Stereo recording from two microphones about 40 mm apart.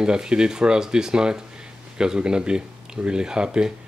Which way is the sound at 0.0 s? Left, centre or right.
Centre.